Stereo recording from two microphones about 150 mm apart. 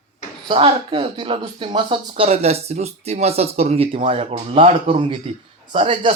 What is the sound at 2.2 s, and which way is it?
Speech, 45° right (ahead or behind).